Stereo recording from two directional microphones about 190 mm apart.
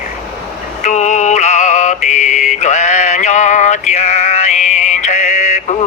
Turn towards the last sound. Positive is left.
turn(degrees=35)  # may be behind; listen again after turning